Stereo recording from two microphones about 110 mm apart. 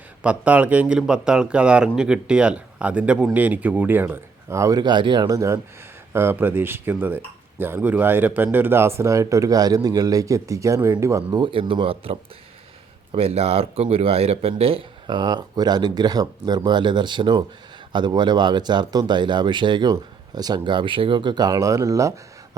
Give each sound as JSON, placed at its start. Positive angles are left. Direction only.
{"t": 0.2, "sound": "speech", "side_deg": -15}
{"t": 4.8, "sound": "speech", "side_deg": -45}
{"t": 11.3, "sound": "speech", "side_deg": -45}